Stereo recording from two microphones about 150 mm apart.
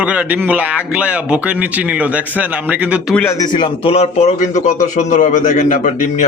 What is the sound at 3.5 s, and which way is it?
Speech, 35° left (ahead or behind).